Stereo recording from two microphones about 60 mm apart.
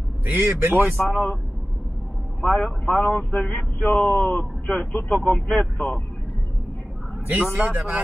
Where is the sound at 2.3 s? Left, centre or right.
Centre.